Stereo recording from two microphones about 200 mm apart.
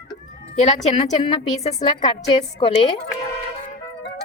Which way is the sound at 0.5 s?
35° left (ahead or behind).